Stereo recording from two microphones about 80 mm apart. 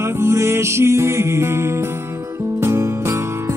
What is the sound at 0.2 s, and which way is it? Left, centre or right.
Music, right.